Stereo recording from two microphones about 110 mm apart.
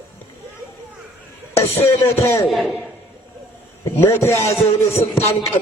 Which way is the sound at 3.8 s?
20° left (ahead or behind).